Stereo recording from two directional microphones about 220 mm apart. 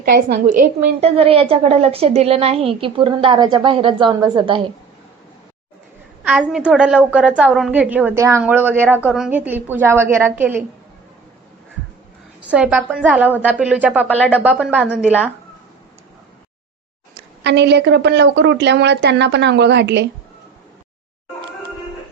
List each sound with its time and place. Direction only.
0.0 s a woman's voice: 40° right (ahead or behind)
1.0 s a woman's voice: 25° right (ahead or behind)
6.2 s a woman's voice: 5° right (ahead or behind)
12.4 s a woman's voice: 5° right (ahead or behind)
14.1 s speech: 5° left (ahead or behind)
14.4 s a woman's voice: 5° right (ahead or behind)
17.2 s a woman's voice: 50° right (ahead or behind)